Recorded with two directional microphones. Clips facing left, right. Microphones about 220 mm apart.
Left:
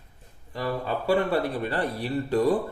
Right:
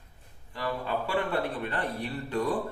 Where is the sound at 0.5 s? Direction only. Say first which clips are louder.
Left 3 dB; 40° left (ahead or behind).